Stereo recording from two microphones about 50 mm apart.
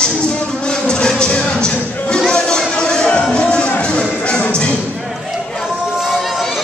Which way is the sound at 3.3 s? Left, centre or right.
Centre.